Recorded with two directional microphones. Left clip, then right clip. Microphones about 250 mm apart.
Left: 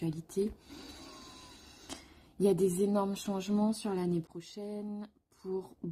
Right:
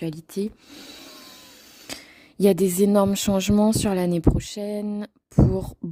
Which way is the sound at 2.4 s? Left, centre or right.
Right.